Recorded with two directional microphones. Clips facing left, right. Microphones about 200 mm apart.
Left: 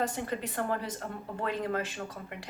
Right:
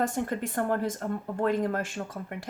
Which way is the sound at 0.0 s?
50° right (ahead or behind).